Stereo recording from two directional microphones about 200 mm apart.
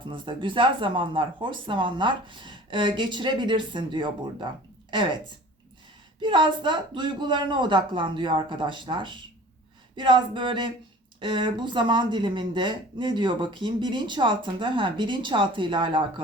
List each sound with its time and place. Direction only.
0.1 s speech: 25° right (ahead or behind)